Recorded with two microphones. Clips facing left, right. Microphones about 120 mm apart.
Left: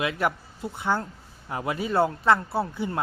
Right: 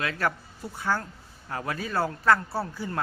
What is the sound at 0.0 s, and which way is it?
Speech, 15° left (ahead or behind).